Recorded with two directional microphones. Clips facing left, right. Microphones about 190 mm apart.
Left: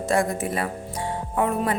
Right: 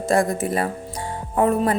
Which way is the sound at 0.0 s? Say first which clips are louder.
Right 3 dB; 35° right (ahead or behind).